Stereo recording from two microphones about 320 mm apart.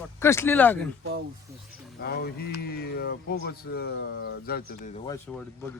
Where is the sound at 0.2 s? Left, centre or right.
Centre.